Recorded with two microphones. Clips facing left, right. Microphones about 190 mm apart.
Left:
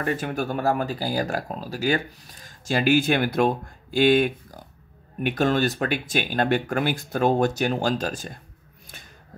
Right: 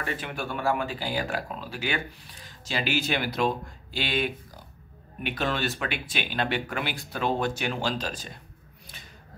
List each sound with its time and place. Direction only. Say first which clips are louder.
0.0 s speech: left 7 dB; 45° left (ahead or behind)